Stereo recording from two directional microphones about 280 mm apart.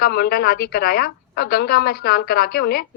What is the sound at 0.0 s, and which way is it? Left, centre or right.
A woman's voice, left.